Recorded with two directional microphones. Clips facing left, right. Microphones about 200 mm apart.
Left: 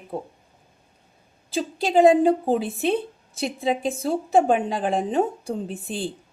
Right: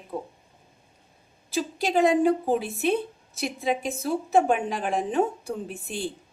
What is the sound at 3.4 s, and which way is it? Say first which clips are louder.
A woman's voice: left 3 dB; 30° left (ahead or behind).